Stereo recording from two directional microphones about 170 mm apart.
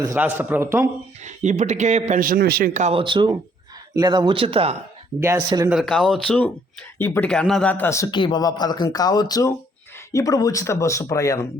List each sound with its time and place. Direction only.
0.2 s a man's voice: 10° right (ahead or behind)
1.2 s a man's voice: 45° right (ahead or behind)
2.9 s speech: 30° right (ahead or behind)
5.2 s a man's voice: 15° right (ahead or behind)
5.6 s a man's voice: centre (ahead or behind); by 11.4 s 20° left (ahead or behind)